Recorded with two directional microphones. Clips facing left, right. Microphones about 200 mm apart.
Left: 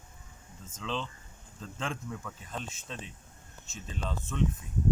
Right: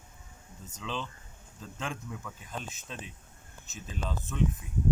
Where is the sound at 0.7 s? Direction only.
5° right (ahead or behind).